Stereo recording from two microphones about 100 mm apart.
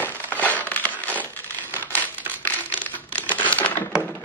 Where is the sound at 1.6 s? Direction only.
20° left (ahead or behind).